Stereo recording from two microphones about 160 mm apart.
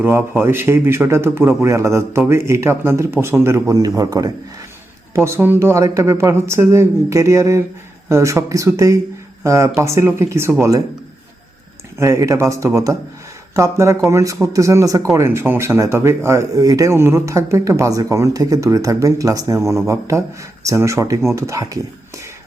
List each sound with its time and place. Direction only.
0.0 s a man's voice: 15° right (ahead or behind)
11.9 s a man's voice: 20° right (ahead or behind)